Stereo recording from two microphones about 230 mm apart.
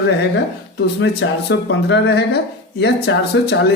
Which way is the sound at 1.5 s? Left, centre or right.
Left.